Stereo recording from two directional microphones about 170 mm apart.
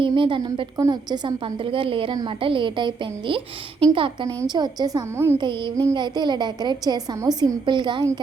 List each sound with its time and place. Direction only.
0.0 s a woman's voice: 30° right (ahead or behind); by 5.4 s 15° right (ahead or behind)
5.4 s a woman's voice: 30° right (ahead or behind)